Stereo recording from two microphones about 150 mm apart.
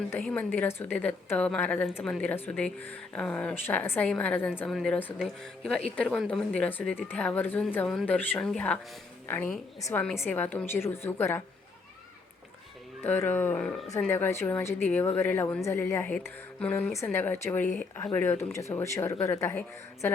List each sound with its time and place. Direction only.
0.2 s a woman's voice: 5° left (ahead or behind)
13.0 s a woman's voice: 15° left (ahead or behind)